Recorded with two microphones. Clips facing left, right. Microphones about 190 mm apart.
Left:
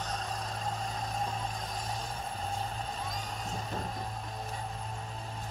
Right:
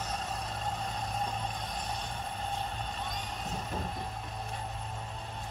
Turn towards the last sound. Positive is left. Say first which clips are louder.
# even
turn(degrees=0)  # may be behind; listen again after turning